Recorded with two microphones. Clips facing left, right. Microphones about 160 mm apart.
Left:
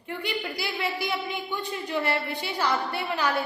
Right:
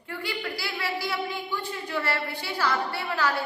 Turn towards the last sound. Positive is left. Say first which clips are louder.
# even
turn(degrees=20)  # may be behind; listen again after turning